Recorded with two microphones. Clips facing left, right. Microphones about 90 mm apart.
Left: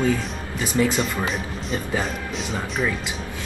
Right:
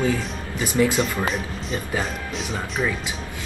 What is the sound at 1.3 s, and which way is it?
Speech, centre (ahead or behind).